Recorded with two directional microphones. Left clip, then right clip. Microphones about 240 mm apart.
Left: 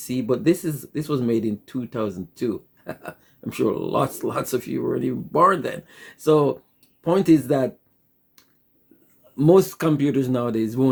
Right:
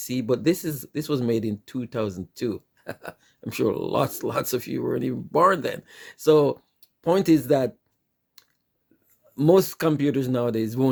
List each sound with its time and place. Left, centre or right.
0.0 s speech: right
8.4 s finger snapping: right
9.3 s speech: right